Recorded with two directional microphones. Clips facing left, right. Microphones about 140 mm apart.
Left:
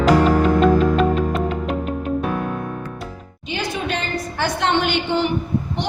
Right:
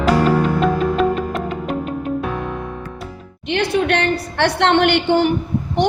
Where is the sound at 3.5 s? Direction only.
65° right (ahead or behind).